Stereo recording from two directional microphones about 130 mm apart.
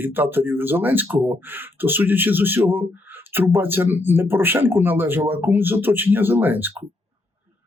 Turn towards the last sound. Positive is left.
turn(degrees=-15)  # may be behind; listen again after turning